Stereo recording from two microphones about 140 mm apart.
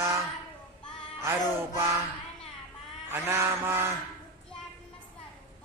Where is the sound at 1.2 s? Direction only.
20° right (ahead or behind).